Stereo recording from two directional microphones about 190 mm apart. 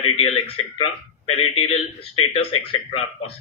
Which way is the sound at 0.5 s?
30° left (ahead or behind).